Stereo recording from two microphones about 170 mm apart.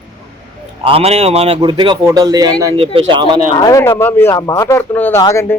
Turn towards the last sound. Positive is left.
turn(degrees=15)  # may be behind; listen again after turning